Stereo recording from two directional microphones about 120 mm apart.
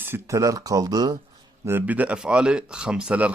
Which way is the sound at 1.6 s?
15° right (ahead or behind).